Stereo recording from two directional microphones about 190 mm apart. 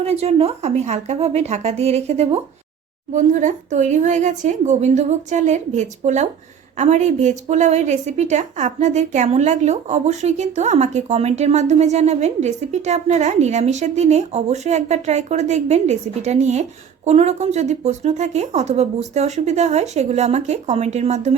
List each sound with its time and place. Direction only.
0.0 s a woman's voice: 35° right (ahead or behind)